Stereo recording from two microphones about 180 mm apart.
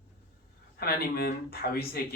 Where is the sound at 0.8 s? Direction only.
60° left (ahead or behind).